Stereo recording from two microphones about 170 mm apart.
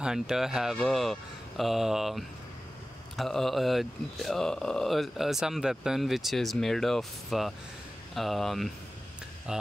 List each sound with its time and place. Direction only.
0.0 s speech: 5° right (ahead or behind)